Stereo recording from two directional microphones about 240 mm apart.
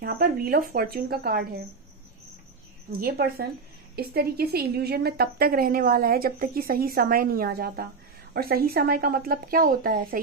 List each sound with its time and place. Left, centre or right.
0.0 s a woman's voice: right
2.9 s a woman's voice: right